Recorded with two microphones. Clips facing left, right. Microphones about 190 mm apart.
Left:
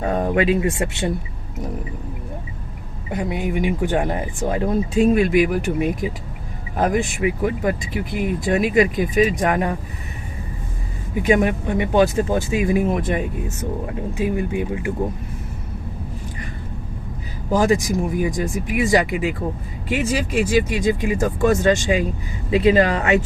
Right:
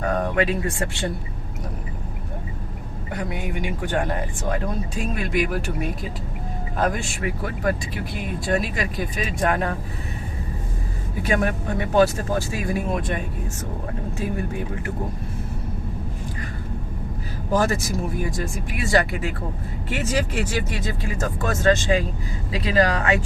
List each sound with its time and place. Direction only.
0.0 s speech: 25° left (ahead or behind)
3.1 s speech: 20° left (ahead or behind)
11.1 s speech: 15° left (ahead or behind)
17.5 s speech: 15° left (ahead or behind)